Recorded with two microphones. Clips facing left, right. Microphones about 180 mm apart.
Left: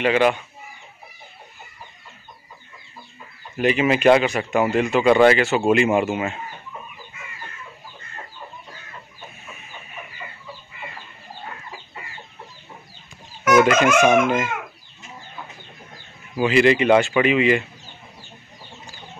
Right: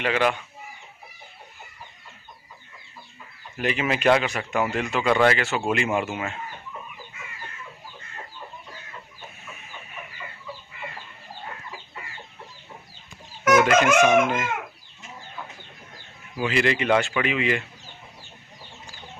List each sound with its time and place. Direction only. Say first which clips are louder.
0.0 s speech: left 5 dB; 10° left (ahead or behind)
3.5 s speech: left 7 dB; 10° left (ahead or behind)
13.7 s speech: left 2 dB; 15° left (ahead or behind)
16.3 s speech: left 7 dB; 10° left (ahead or behind)